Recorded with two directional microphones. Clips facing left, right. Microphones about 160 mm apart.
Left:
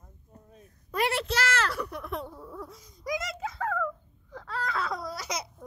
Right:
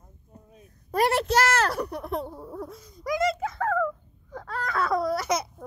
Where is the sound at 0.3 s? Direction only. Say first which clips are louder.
Right 2 dB; 10° right (ahead or behind).